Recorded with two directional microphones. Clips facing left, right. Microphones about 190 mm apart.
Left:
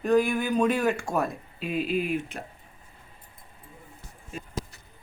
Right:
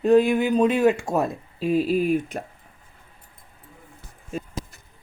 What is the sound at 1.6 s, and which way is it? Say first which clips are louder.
Speech: right 7 dB; 35° right (ahead or behind).